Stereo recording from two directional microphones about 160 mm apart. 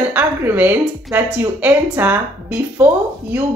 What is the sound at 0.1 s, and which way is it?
A woman's voice, 10° right (ahead or behind).